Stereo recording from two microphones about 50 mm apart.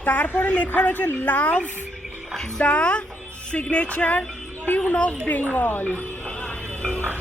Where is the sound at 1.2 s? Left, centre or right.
Left.